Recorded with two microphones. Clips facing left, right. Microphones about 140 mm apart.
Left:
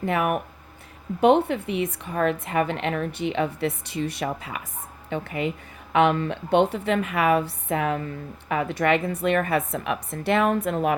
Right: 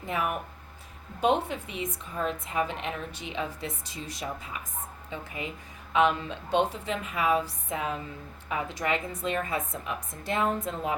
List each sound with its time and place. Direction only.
0.0 s a woman's voice: 65° left (ahead or behind)